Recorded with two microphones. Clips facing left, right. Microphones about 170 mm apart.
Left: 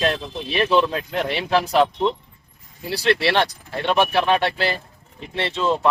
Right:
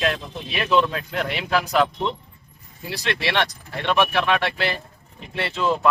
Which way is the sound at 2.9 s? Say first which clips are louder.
Left 5 dB; 35° left (ahead or behind).